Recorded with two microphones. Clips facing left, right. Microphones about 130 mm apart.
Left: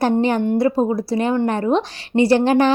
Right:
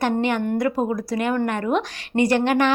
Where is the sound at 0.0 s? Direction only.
35° left (ahead or behind).